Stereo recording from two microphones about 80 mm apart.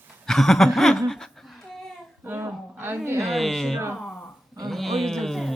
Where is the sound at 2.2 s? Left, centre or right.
Right.